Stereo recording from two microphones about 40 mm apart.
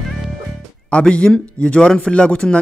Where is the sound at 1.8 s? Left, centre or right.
Centre.